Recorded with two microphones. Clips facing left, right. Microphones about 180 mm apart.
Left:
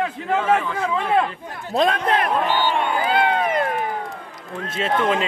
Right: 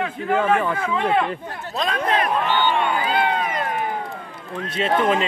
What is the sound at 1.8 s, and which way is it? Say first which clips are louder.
Speech: left 3 dB; 55° left (ahead or behind).